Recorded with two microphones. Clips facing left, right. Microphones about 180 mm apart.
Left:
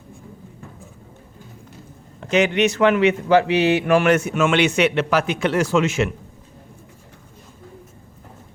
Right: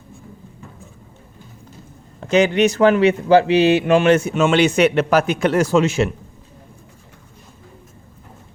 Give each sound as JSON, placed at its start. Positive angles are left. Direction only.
{"t": 2.2, "sound": "speech", "side_deg": -35}